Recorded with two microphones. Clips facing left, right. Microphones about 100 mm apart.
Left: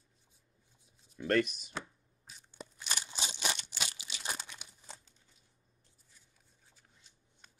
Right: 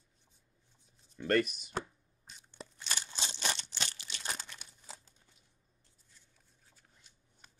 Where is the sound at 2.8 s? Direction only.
15° left (ahead or behind).